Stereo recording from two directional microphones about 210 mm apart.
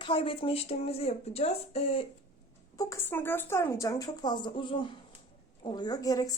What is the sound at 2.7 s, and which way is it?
Speech, 10° left (ahead or behind).